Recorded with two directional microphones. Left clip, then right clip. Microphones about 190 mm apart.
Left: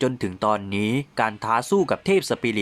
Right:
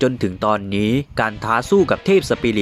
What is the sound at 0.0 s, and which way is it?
Speech, 15° right (ahead or behind).